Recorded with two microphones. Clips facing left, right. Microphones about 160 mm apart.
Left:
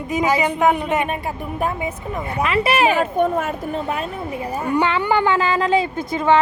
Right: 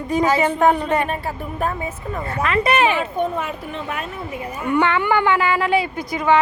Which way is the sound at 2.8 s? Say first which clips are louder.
Left 3 dB; 45° left (ahead or behind).